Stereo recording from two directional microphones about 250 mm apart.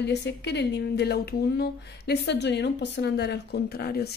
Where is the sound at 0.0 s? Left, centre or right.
Left.